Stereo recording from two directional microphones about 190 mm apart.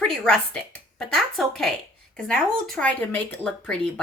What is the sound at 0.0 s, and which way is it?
Speech, 5° left (ahead or behind).